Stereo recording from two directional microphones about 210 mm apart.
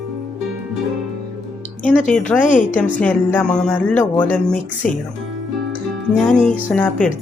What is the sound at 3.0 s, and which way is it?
Speech, 5° left (ahead or behind).